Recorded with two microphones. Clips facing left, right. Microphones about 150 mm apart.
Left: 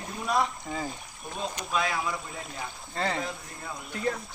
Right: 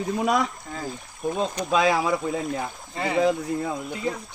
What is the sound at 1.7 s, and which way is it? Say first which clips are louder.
Speech: right 9 dB; 90° right.